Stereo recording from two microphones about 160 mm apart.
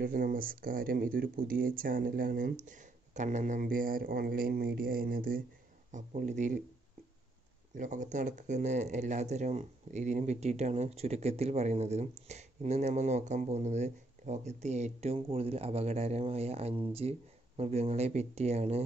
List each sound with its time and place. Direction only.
0.0 s speech: 60° right (ahead or behind)
5.9 s speech: 50° right (ahead or behind)
7.7 s speech: 50° right (ahead or behind)